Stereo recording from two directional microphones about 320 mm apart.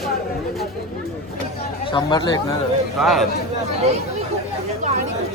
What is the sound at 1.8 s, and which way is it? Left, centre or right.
Speech, centre.